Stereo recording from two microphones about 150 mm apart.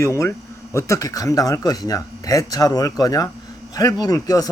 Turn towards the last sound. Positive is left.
turn(degrees=25)  # may be behind; listen again after turning